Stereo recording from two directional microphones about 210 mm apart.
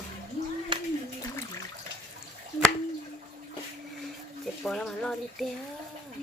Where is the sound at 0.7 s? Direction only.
25° right (ahead or behind).